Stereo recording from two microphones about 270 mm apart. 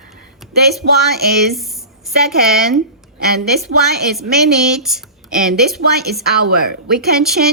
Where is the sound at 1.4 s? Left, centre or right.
Centre.